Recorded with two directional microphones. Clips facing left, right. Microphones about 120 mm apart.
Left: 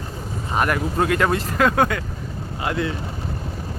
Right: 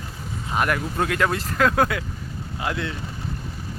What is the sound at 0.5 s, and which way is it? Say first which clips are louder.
Speech: left 2 dB; centre (ahead or behind).